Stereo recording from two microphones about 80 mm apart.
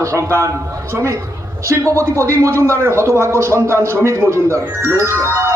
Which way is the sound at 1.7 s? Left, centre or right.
Right.